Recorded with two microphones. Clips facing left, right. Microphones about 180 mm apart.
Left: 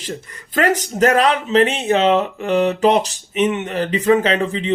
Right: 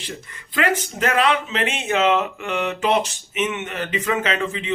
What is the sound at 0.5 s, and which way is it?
Speech, 40° left (ahead or behind).